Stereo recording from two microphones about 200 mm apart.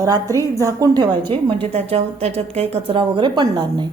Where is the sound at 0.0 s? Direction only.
15° right (ahead or behind).